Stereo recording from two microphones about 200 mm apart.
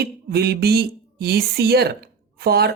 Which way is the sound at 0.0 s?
55° right (ahead or behind).